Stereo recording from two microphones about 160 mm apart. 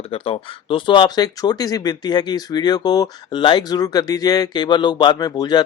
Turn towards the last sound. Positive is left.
turn(degrees=25)  # may be behind; listen again after turning